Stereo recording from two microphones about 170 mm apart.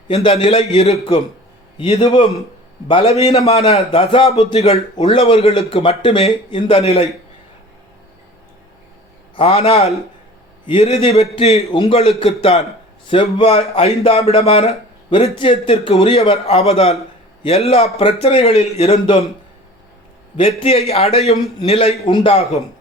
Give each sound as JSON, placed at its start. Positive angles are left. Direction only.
{"t": 0.1, "sound": "a man's voice", "side_deg": 30}
{"t": 9.3, "sound": "a man's voice", "side_deg": 35}
{"t": 20.3, "sound": "a man's voice", "side_deg": 30}